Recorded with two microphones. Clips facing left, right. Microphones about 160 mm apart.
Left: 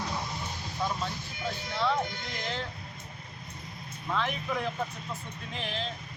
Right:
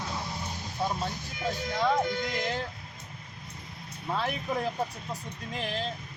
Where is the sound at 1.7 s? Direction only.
45° right (ahead or behind).